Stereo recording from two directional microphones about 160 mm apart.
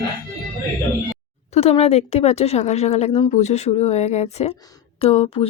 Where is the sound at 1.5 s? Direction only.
40° left (ahead or behind).